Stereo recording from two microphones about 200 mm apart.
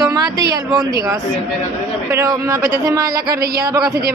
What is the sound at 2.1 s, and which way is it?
A woman's voice, 15° right (ahead or behind).